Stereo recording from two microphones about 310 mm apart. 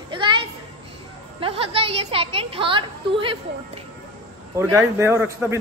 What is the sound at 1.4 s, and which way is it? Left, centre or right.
A woman's voice, centre.